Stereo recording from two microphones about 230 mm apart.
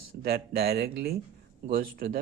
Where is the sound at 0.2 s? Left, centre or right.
Right.